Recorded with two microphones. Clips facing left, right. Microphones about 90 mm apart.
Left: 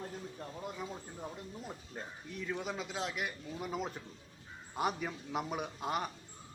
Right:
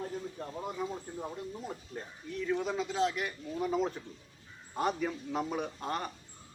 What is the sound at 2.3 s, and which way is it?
A man's voice, 5° left (ahead or behind).